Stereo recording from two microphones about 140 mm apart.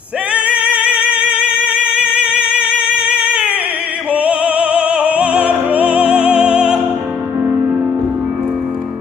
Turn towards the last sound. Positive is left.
turn(degrees=-15)  # may be behind; listen again after turning